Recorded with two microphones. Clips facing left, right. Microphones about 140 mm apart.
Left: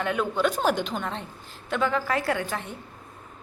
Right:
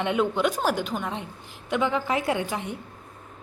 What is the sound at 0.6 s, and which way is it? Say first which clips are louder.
A woman's voice: left 1 dB; 5° right (ahead or behind).